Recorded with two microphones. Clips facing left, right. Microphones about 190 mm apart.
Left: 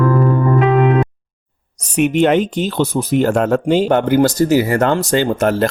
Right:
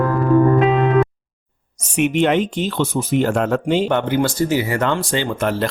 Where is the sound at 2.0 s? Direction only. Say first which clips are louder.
Left 3 dB; 40° left (ahead or behind).